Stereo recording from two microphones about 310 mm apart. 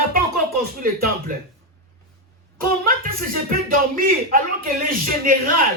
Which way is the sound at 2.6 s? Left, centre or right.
Right.